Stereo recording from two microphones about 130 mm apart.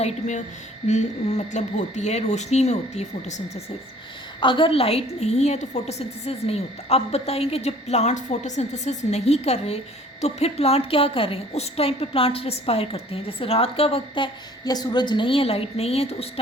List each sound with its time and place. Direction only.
0.0 s speech: 65° left (ahead or behind)
4.4 s a woman's voice: 40° left (ahead or behind)
14.6 s a woman's voice: 30° left (ahead or behind); by 16.3 s 50° left (ahead or behind)